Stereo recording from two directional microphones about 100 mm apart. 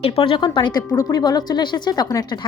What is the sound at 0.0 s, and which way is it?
Speech, 65° left (ahead or behind).